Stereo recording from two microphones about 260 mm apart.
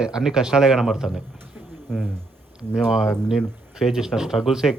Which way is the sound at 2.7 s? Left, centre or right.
Centre.